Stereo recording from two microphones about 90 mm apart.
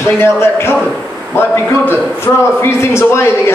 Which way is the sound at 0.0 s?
30° left (ahead or behind).